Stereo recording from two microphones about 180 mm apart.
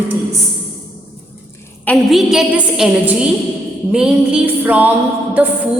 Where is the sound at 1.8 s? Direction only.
Centre (ahead or behind).